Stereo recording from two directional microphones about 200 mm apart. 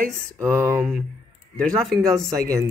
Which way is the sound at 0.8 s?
Centre (ahead or behind).